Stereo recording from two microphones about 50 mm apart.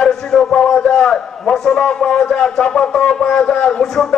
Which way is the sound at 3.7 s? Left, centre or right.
Centre.